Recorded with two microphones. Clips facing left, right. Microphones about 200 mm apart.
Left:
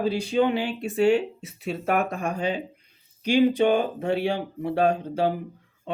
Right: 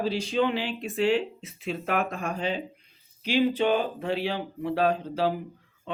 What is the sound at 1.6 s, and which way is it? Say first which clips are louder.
Speech: left 3 dB; 40° left (ahead or behind).